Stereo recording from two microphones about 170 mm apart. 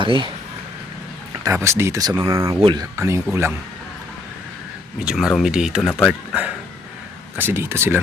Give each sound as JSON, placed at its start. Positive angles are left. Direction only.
{"t": 0.0, "sound": "speech", "side_deg": -30}
{"t": 1.5, "sound": "speech", "side_deg": -15}
{"t": 2.6, "sound": "speech", "side_deg": -30}
{"t": 2.9, "sound": "speech", "side_deg": -15}
{"t": 4.9, "sound": "speech", "side_deg": -5}